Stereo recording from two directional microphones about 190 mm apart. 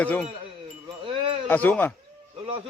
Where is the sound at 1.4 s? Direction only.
10° left (ahead or behind).